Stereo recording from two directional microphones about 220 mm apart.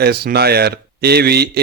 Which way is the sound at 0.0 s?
45° right (ahead or behind).